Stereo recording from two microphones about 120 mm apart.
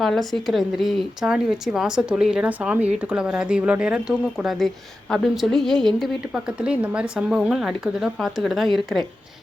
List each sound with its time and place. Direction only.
0.0 s speech: centre (ahead or behind)